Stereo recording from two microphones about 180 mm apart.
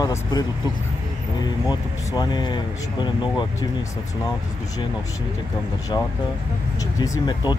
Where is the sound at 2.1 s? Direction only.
25° left (ahead or behind).